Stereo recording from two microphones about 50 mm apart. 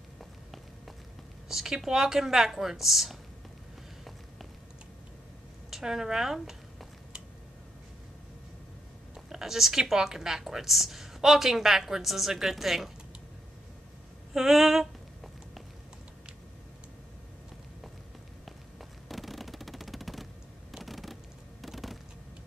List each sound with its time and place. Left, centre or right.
1.5 s a woman's voice: centre
5.7 s a woman's voice: centre
9.1 s a woman's voice: centre
14.3 s a woman's voice: centre
18.4 s a sound: centre